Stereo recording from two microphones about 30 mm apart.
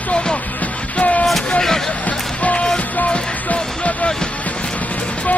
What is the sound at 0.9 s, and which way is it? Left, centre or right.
Music, left.